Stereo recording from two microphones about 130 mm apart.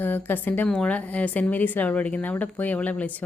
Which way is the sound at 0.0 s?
15° left (ahead or behind).